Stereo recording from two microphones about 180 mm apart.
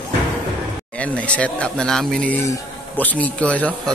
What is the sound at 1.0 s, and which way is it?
A man's voice, 5° left (ahead or behind).